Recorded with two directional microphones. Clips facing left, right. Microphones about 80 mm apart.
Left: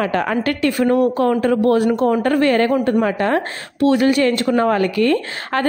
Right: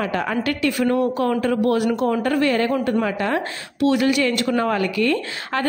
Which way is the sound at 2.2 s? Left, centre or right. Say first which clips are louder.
Left 4 dB; left.